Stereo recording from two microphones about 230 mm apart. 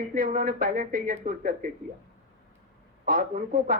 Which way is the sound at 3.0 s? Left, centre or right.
Right.